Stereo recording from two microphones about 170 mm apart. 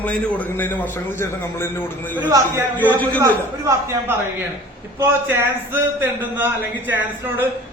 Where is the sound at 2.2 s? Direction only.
20° right (ahead or behind).